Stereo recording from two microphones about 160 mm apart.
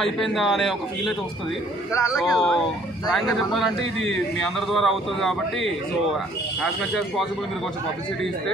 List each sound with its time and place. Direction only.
0.0 s speech: centre (ahead or behind)
1.9 s speech: 20° left (ahead or behind)
2.1 s speech: centre (ahead or behind)